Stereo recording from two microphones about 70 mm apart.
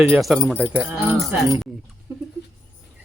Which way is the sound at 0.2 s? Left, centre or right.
Centre.